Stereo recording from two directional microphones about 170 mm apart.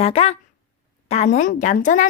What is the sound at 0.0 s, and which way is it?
Speech, 35° left (ahead or behind).